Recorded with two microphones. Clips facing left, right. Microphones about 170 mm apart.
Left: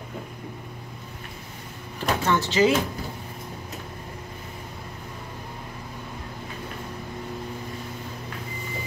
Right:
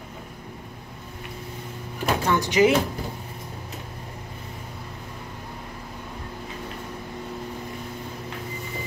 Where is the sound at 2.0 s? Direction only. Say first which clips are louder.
Right 1 dB; 15° right (ahead or behind).